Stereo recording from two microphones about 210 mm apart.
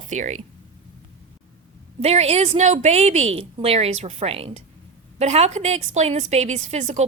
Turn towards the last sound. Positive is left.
turn(degrees=-35)  # may be behind; listen again after turning